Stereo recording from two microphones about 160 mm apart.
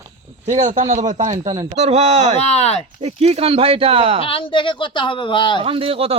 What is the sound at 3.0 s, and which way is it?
Speech, 40° right (ahead or behind).